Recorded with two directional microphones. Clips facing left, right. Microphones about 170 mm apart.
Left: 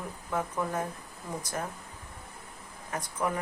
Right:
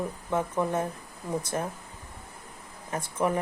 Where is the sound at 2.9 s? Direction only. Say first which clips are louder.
Right 3 dB; 25° right (ahead or behind).